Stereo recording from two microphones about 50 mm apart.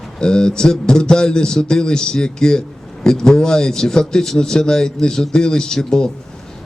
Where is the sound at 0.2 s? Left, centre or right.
Centre.